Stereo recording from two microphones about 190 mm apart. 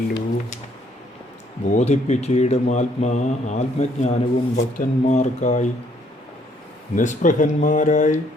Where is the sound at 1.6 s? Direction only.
35° left (ahead or behind).